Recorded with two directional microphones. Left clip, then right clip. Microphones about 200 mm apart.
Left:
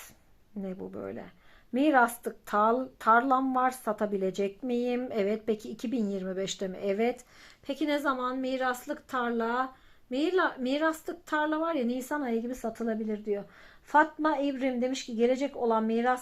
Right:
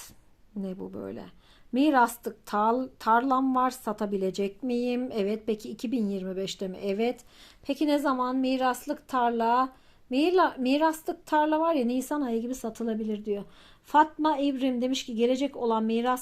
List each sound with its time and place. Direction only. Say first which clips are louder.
0.6 s speech: right 1 dB; 25° right (ahead or behind)